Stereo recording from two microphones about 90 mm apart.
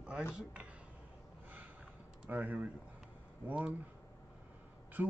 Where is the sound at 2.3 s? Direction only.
20° right (ahead or behind).